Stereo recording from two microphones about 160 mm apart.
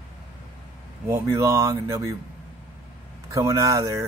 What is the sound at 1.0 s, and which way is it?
Speech, 15° right (ahead or behind).